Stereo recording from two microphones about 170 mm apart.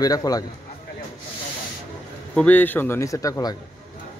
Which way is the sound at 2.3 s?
10° left (ahead or behind).